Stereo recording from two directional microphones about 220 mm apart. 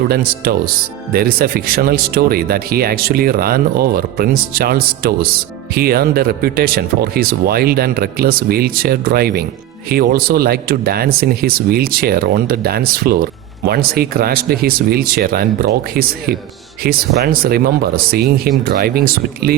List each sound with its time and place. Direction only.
0.1 s speech: 45° right (ahead or behind)